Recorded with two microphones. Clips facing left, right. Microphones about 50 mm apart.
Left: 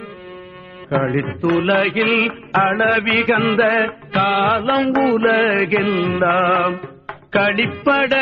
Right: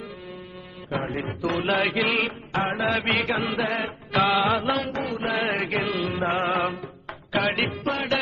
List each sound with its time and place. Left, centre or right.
0.9 s music: left
1.2 s mantra: left
2.6 s mantra: left
2.8 s mantra: left
4.1 s music: centre
4.4 s music: left
4.9 s mantra: left
5.2 s mantra: left
6.2 s music: left
7.1 s music: left